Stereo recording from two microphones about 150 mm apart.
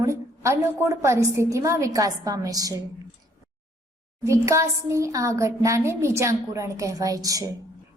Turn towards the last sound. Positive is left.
turn(degrees=-25)  # may be behind; listen again after turning